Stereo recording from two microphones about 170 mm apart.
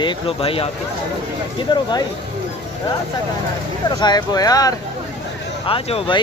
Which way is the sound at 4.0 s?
25° left (ahead or behind).